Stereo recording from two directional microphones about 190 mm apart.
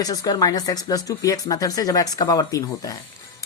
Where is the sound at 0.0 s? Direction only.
20° left (ahead or behind).